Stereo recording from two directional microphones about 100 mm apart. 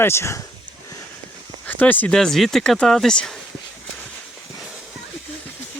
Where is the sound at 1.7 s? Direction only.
20° left (ahead or behind).